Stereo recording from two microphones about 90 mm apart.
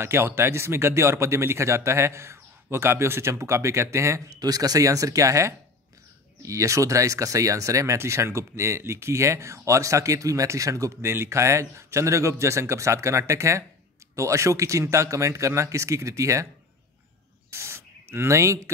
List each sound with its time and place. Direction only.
0.0 s speech: 25° right (ahead or behind)
17.5 s spray: 30° right (ahead or behind)